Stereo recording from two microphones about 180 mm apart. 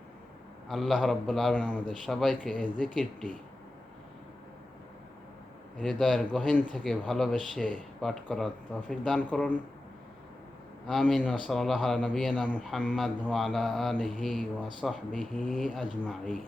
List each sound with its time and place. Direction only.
0.7 s a man's voice: centre (ahead or behind)
5.8 s a man's voice: 5° left (ahead or behind)
10.8 s a man's voice: centre (ahead or behind)